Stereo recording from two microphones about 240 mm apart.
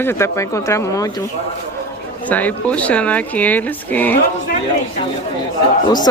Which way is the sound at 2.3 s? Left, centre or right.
Centre.